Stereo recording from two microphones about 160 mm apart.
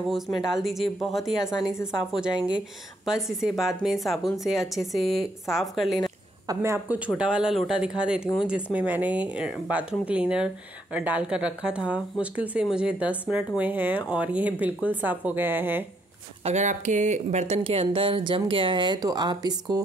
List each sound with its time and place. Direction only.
0.1 s a woman's voice: centre (ahead or behind)
1.6 s a woman's voice: 15° left (ahead or behind)
1.9 s a woman's voice: 5° right (ahead or behind)
6.4 s speech: 20° right (ahead or behind)
7.2 s a woman's voice: 5° right (ahead or behind)
16.4 s speech: 50° right (ahead or behind); by 19.8 s 25° right (ahead or behind)